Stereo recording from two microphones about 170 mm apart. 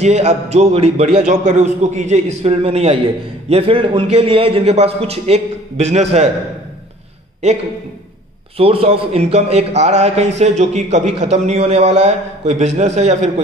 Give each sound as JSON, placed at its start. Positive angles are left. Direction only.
{"t": 0.0, "sound": "a man's voice", "side_deg": -40}
{"t": 7.4, "sound": "a man's voice", "side_deg": -40}